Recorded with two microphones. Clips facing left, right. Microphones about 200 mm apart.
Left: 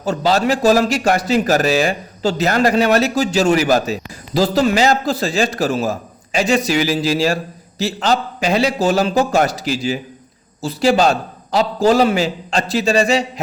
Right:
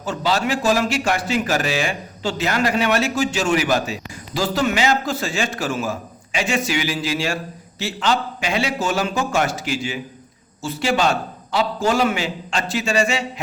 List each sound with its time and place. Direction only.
0.0 s a man's voice: 40° left (ahead or behind)